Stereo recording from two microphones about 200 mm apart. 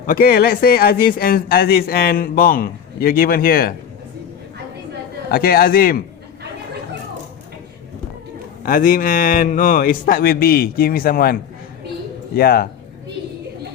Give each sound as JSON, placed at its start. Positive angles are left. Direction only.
{"t": 0.0, "sound": "speech", "side_deg": 45}
{"t": 5.3, "sound": "speech", "side_deg": 50}
{"t": 8.6, "sound": "speech", "side_deg": 45}